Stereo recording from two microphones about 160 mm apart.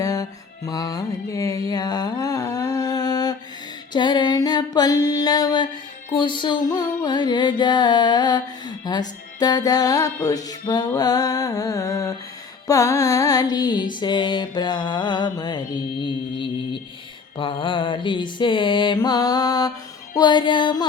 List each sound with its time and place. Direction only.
0.0 s music: 20° left (ahead or behind)
3.9 s female singing: 30° left (ahead or behind)
6.1 s music: 30° left (ahead or behind)